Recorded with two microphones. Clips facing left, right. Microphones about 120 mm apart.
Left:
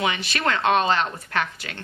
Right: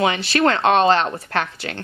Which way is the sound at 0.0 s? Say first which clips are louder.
Right 7 dB; 30° right (ahead or behind).